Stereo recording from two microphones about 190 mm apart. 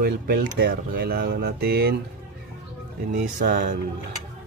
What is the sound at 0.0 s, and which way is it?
Speech, 55° right (ahead or behind).